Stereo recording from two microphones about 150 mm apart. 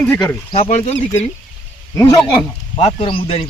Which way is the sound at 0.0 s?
10° left (ahead or behind).